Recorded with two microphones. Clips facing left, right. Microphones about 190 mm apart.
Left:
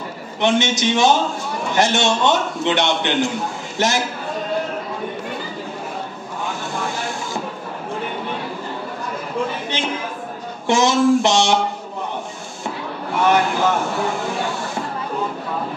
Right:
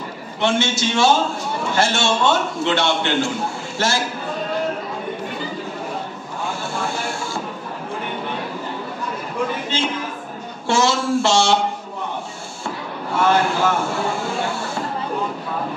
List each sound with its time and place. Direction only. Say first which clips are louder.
0.4 s a man's voice: left 2 dB; 15° left (ahead or behind)
9.7 s a sound: right 3 dB; 15° left (ahead or behind)
10.7 s a man's voice: left 4 dB; 15° left (ahead or behind)
13.1 s speech: even; 15° left (ahead or behind)